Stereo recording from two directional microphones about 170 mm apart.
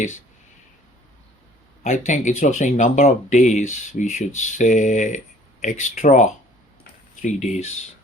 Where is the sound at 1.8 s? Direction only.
40° left (ahead or behind).